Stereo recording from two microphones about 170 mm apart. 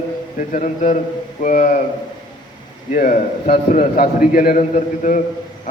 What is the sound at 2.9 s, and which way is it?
A man's voice, 55° left (ahead or behind).